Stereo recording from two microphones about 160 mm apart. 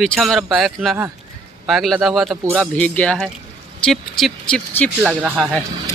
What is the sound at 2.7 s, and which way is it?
Speech, 10° left (ahead or behind).